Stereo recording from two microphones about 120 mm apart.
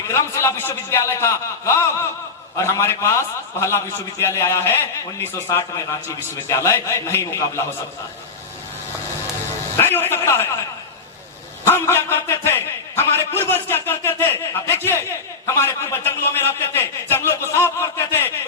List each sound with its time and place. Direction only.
0.1 s a man's voice: 25° left (ahead or behind)
9.7 s a man's voice: 20° left (ahead or behind)
11.6 s a man's voice: 20° left (ahead or behind)